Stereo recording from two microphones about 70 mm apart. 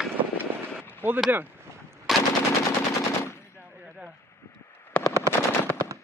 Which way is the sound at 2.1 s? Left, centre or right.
Centre.